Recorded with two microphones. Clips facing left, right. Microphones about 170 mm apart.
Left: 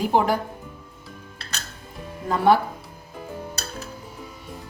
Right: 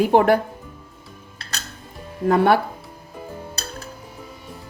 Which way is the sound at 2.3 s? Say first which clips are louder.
Right 2 dB; 65° right (ahead or behind).